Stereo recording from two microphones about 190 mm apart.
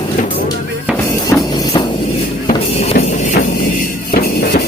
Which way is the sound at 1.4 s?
20° left (ahead or behind).